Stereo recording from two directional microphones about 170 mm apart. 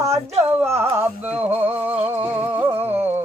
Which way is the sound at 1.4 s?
10° right (ahead or behind).